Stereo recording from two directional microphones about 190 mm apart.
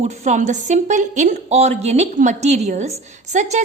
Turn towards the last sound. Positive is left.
turn(degrees=-40)  # may be behind; listen again after turning